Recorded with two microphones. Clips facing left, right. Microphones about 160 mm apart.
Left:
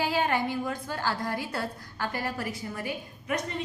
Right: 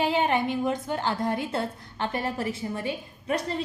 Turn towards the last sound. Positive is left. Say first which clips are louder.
# right 3 dB
turn(degrees=-30)  # may be behind; listen again after turning